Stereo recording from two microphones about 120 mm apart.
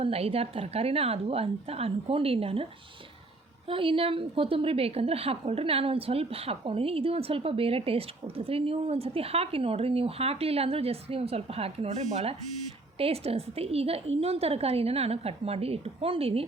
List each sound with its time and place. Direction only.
0.0 s a woman's voice: 55° right (ahead or behind)
3.7 s a woman's voice: 50° right (ahead or behind)